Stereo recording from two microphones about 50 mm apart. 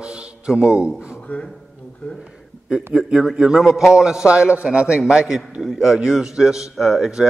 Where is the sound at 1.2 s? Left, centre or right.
Left.